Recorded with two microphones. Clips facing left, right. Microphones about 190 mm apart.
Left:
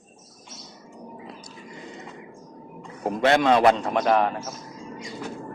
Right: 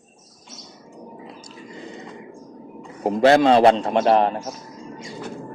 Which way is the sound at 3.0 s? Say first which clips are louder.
Right 5 dB; 30° right (ahead or behind).